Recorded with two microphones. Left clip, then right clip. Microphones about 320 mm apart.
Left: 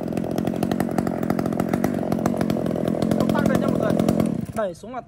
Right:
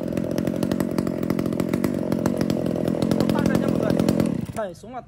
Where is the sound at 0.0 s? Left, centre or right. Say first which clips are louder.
Even; centre.